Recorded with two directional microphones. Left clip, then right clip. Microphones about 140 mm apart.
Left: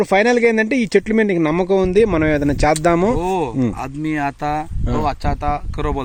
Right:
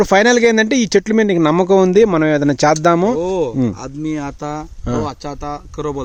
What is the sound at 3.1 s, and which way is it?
Speech, 20° left (ahead or behind).